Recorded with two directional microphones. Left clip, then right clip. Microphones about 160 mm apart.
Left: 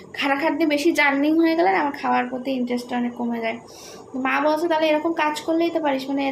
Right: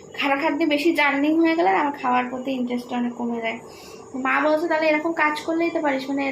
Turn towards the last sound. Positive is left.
turn(degrees=10)  # may be behind; listen again after turning